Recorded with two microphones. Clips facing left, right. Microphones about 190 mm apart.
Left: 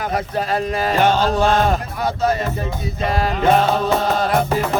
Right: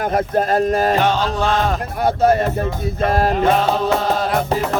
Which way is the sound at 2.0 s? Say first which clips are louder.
Right 9 dB; 55° right (ahead or behind).